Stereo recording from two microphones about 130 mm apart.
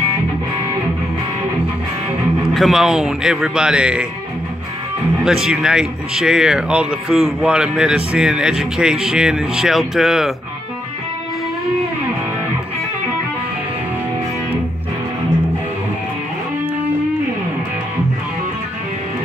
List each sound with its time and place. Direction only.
2.5 s speech: centre (ahead or behind)
5.2 s speech: 5° right (ahead or behind)